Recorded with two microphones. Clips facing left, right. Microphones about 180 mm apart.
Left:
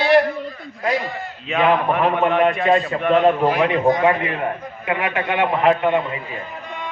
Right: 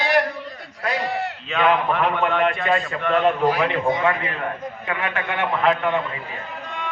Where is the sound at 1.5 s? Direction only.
15° left (ahead or behind).